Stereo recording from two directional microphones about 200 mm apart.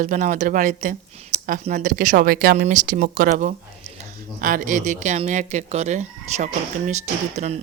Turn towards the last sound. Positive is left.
turn(degrees=-35)  # may be behind; listen again after turning